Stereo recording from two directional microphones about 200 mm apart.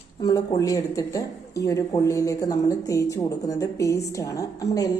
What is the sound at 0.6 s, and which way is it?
Speech, 15° left (ahead or behind).